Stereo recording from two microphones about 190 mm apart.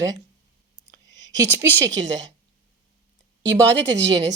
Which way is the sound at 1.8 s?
75° right (ahead or behind).